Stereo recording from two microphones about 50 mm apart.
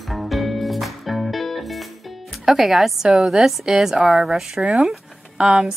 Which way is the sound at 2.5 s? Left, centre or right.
Centre.